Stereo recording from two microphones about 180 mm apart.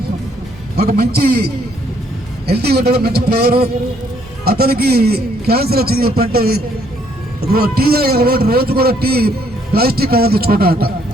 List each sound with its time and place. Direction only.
0.8 s a man's voice: 55° right (ahead or behind)
2.5 s a man's voice: 60° right (ahead or behind)